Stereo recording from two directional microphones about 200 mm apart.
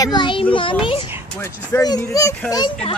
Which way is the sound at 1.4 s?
15° left (ahead or behind).